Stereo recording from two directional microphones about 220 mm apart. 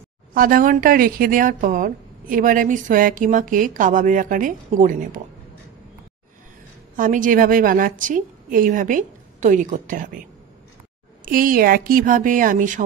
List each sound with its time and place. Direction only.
0.3 s speech: 40° right (ahead or behind)
7.0 s speech: 35° right (ahead or behind)
11.2 s speech: 40° right (ahead or behind)